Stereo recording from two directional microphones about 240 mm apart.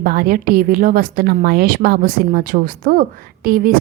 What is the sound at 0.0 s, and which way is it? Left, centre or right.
A woman's voice, right.